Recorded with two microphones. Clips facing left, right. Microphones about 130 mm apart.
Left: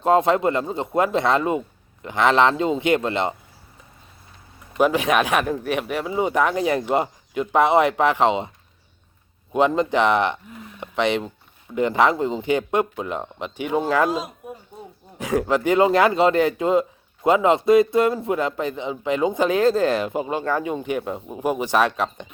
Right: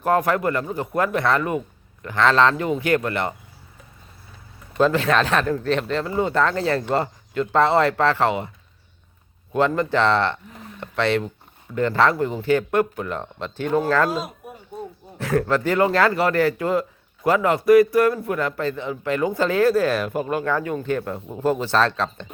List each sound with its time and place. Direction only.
0.0 s a man's voice: 20° left (ahead or behind)
4.8 s speech: 15° left (ahead or behind)
9.5 s a man's voice: 20° left (ahead or behind)